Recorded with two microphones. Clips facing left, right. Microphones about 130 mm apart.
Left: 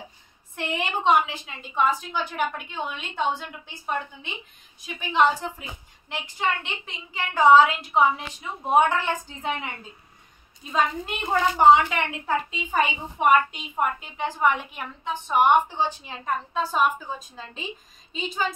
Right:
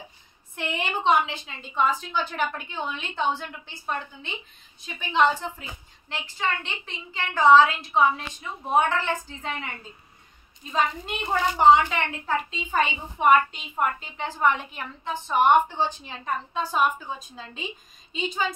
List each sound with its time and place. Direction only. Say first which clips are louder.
0.6 s a woman's voice: left 1 dB; centre (ahead or behind); by 9.7 s 15° left (ahead or behind)
10.7 s a woman's voice: left 1 dB; 10° left (ahead or behind)